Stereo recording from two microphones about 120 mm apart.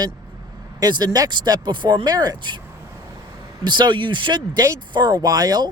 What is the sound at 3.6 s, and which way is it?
A man's voice, 40° right (ahead or behind).